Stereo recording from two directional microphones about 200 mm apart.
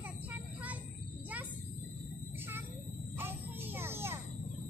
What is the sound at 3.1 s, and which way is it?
Music, 10° right (ahead or behind).